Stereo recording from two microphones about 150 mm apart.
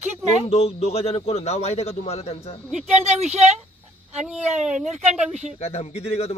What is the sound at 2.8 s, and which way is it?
Speech, 50° right (ahead or behind).